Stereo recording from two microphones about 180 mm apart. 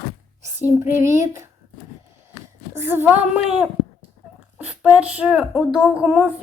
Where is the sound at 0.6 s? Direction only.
15° right (ahead or behind).